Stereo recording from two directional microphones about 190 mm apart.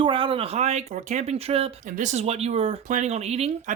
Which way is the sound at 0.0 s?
25° right (ahead or behind).